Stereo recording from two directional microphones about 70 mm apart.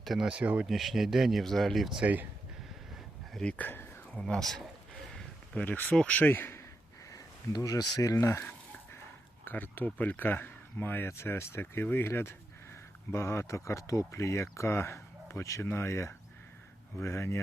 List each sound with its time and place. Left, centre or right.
0.0 s speech: centre
0.3 s speech: centre
0.7 s speech: centre
2.0 s speech: right
3.6 s speech: left
4.1 s speech: centre
5.6 s speech: left
7.1 s a sound: left
7.9 s a sound: left
9.4 s speech: left